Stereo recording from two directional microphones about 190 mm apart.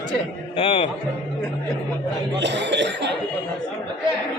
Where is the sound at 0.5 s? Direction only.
30° left (ahead or behind).